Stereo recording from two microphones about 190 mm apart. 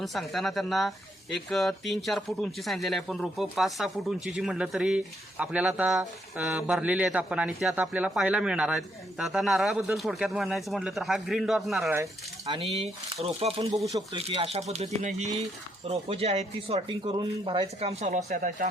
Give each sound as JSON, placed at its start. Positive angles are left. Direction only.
{"t": 0.0, "sound": "speech", "side_deg": 0}
{"t": 12.5, "sound": "speech", "side_deg": -25}
{"t": 17.2, "sound": "speech", "side_deg": -25}